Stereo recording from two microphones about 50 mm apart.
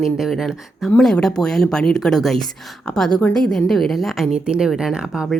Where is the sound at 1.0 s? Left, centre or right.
Centre.